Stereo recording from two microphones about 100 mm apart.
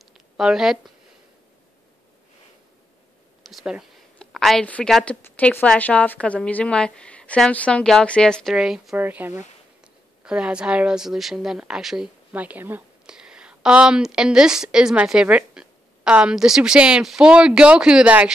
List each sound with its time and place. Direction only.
0.0 s a sound: 5° right (ahead or behind)
3.4 s a sound: centre (ahead or behind)
5.2 s a woman's voice: 15° left (ahead or behind)
8.5 s a woman's voice: 5° right (ahead or behind)
8.9 s speech: 20° right (ahead or behind)
10.2 s a woman's voice: 10° right (ahead or behind)
12.3 s a woman's voice: 15° right (ahead or behind)
13.0 s a woman's voice: 5° right (ahead or behind)